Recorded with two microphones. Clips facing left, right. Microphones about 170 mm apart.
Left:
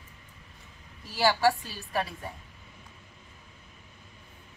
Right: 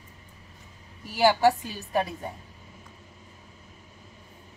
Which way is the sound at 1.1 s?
15° right (ahead or behind).